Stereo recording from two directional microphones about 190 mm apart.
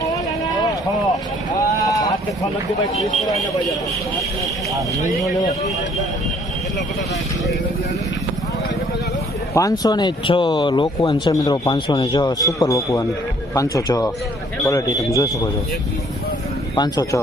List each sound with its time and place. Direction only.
1.8 s a sound: 20° left (ahead or behind)
9.6 s speech: 20° left (ahead or behind)
16.7 s speech: 20° left (ahead or behind)